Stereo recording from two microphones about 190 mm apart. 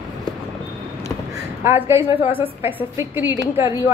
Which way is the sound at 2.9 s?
15° right (ahead or behind).